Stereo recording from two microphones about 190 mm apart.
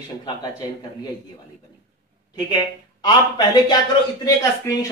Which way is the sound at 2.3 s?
20° left (ahead or behind).